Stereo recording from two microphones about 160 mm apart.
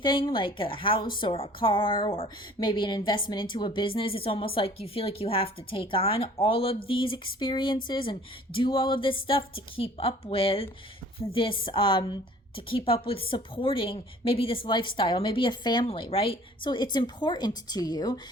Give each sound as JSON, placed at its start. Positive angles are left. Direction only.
{"t": 0.0, "sound": "a woman's voice", "side_deg": 30}